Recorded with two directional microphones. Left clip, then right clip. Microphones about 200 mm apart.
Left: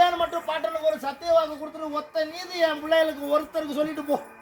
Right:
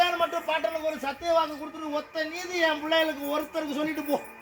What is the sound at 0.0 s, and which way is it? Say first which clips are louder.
Speech: left 3 dB; 40° left (ahead or behind).